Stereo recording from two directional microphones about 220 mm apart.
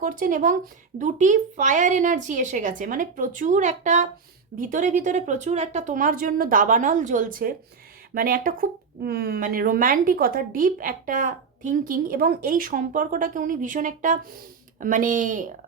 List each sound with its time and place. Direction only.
0.0 s speech: 35° right (ahead or behind)